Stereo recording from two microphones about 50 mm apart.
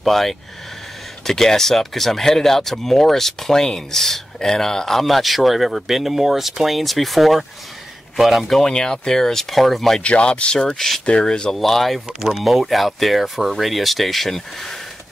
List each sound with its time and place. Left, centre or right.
0.0 s speech: centre
10.0 s speech: left
11.5 s speech: centre